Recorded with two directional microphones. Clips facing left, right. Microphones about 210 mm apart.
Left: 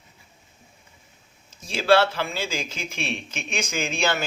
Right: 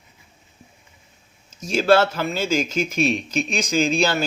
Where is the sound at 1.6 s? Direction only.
45° right (ahead or behind).